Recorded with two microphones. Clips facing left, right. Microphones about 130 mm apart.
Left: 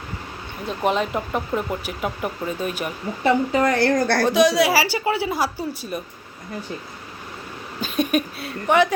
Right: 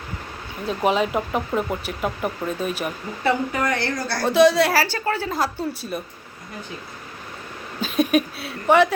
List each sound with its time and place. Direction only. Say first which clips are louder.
0.7 s speech: right 1 dB; centre (ahead or behind)
3.5 s a woman's voice: left 4 dB; 25° left (ahead or behind)
3.8 s a woman's voice: left 7 dB; 45° left (ahead or behind)
4.3 s speech: right 4 dB; centre (ahead or behind)
7.8 s speech: right 2 dB; centre (ahead or behind)